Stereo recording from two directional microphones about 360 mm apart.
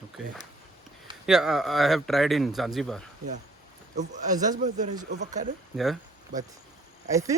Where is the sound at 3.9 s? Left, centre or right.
Centre.